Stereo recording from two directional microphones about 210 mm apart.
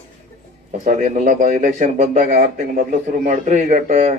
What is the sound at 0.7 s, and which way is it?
Speech, 35° right (ahead or behind).